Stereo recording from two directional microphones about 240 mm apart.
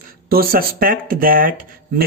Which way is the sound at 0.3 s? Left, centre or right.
Right.